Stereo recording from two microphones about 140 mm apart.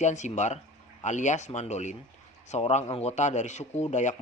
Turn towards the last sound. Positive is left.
turn(degrees=60)  # may be behind; listen again after turning